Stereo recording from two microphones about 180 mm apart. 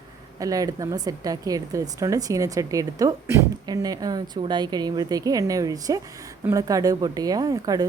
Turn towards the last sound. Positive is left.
turn(degrees=-20)  # may be behind; listen again after turning